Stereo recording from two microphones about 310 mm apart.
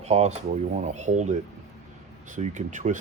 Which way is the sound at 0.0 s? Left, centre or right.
Right.